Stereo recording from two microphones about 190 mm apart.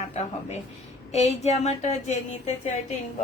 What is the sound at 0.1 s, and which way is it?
Speech, 35° left (ahead or behind).